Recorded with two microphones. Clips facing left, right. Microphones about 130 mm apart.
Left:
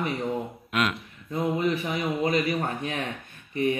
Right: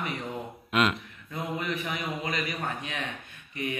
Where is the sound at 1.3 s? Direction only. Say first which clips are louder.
Left 7 dB; 30° left (ahead or behind).